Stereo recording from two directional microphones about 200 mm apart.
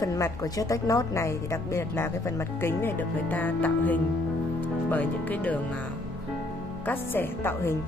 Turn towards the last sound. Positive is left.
turn(degrees=10)  # may be behind; listen again after turning